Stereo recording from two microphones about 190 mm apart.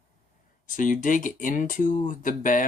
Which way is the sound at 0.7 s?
45° left (ahead or behind).